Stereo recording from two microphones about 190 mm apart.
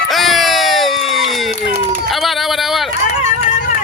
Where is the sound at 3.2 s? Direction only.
45° left (ahead or behind).